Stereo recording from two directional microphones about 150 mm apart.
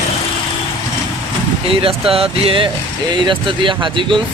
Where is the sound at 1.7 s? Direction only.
40° right (ahead or behind).